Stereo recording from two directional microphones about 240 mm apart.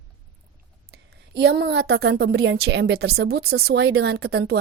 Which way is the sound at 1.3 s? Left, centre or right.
Right.